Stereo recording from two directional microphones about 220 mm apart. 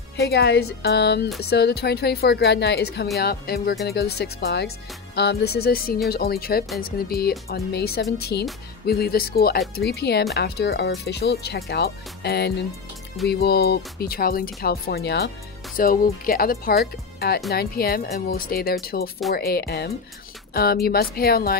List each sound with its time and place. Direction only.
0.2 s speech: 45° left (ahead or behind)